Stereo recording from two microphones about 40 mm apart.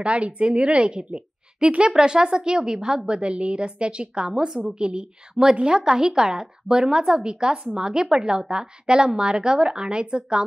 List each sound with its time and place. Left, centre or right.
0.0 s a woman's voice: right